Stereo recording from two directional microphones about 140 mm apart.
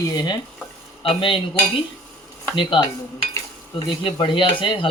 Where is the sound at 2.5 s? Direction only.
35° left (ahead or behind).